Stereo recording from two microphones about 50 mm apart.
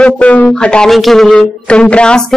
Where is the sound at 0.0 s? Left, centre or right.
Left.